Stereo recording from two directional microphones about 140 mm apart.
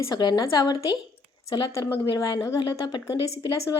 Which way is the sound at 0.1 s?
30° left (ahead or behind).